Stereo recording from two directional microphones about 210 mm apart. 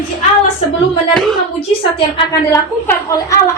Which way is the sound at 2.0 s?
25° left (ahead or behind).